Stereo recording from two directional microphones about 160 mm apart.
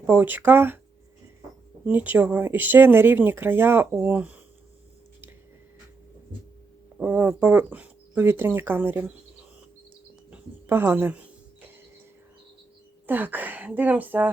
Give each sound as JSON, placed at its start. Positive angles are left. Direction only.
{"t": 0.0, "sound": "speech", "side_deg": -15}
{"t": 1.8, "sound": "speech", "side_deg": -10}
{"t": 7.0, "sound": "speech", "side_deg": -10}
{"t": 10.3, "sound": "a sound", "side_deg": -15}
{"t": 13.1, "sound": "speech", "side_deg": -10}